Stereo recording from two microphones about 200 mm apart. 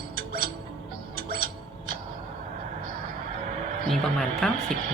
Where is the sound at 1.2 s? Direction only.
50° right (ahead or behind).